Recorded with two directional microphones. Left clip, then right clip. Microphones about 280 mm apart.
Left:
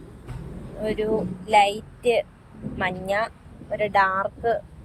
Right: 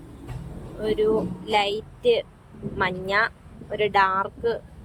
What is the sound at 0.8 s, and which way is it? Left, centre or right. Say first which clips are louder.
Speech: right 3 dB; centre.